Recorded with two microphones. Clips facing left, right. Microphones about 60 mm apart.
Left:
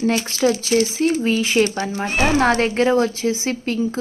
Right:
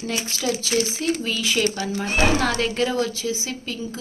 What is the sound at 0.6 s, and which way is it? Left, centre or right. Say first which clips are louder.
Speech: left 6 dB; left.